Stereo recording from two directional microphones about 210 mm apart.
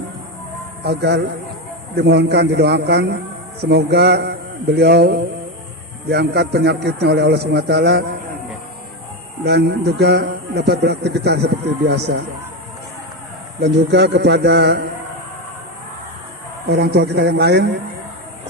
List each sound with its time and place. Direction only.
0.9 s a man's voice: 55° right (ahead or behind)
9.4 s a man's voice: 50° right (ahead or behind)
13.6 s a man's voice: 55° right (ahead or behind)
16.6 s a man's voice: 50° right (ahead or behind)